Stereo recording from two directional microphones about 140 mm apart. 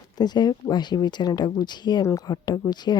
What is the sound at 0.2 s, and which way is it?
Speech, 30° left (ahead or behind).